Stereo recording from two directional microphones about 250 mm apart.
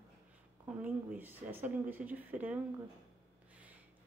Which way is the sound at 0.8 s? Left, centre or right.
Centre.